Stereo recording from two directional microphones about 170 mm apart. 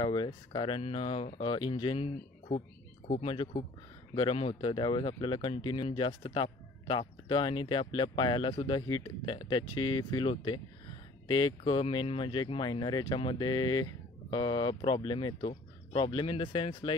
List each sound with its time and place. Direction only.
0.0 s speech: 25° left (ahead or behind)